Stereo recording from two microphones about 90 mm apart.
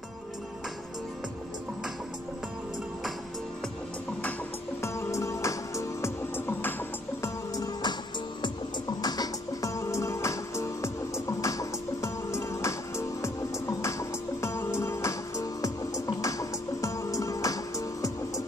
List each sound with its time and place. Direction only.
4.8 s music: 30° left (ahead or behind)
7.5 s music: 45° left (ahead or behind)
9.0 s music: 45° left (ahead or behind)